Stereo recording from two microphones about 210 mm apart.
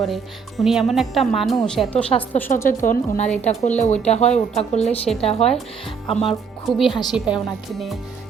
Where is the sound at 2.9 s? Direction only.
35° left (ahead or behind).